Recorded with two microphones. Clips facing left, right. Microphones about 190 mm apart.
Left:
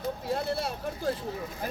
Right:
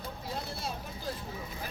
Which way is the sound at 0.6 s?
70° left (ahead or behind).